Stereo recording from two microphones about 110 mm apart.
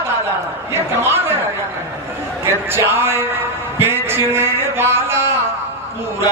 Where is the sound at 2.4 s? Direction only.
25° right (ahead or behind).